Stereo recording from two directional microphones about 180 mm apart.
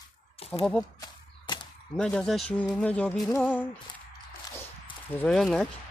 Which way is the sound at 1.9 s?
5° left (ahead or behind).